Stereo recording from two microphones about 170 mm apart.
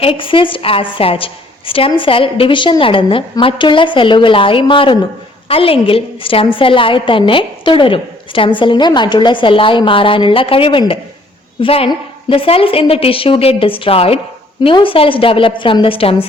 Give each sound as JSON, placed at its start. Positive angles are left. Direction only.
{"t": 0.0, "sound": "a woman's voice", "side_deg": 30}